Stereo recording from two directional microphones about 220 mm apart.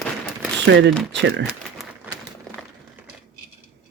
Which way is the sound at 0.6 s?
55° right (ahead or behind).